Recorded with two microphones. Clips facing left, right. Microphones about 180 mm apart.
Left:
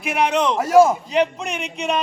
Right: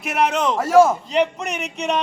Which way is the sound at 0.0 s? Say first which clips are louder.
Left 1 dB; centre (ahead or behind).